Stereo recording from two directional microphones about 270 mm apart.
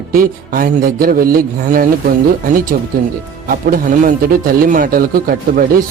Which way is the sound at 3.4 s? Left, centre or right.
Right.